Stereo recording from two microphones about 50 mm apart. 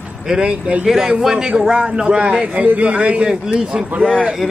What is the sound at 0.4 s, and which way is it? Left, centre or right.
Speech, right.